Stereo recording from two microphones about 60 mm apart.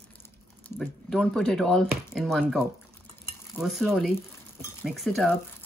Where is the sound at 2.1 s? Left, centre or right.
Centre.